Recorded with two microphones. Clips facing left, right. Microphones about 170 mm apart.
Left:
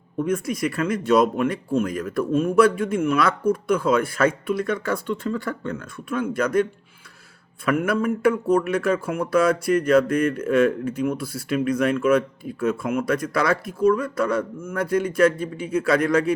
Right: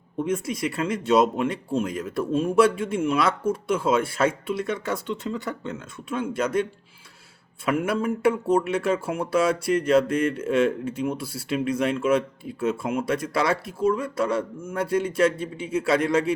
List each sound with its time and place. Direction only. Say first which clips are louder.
0.2 s speech: left 2 dB; 25° right (ahead or behind)